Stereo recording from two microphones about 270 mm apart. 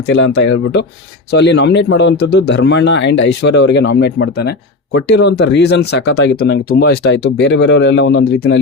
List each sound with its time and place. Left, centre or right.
0.1 s speech: left